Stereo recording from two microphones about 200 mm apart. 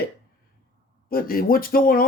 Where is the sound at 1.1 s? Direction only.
45° left (ahead or behind).